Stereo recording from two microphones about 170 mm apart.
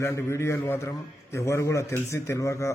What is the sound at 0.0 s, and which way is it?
A man's voice, 15° left (ahead or behind).